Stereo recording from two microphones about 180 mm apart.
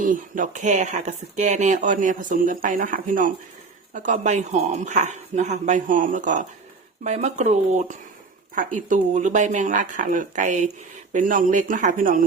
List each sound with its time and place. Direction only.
0.0 s speech: 45° right (ahead or behind)